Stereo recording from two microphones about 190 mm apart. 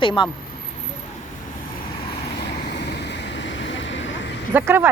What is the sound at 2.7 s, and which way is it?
Vehicle, 65° left (ahead or behind).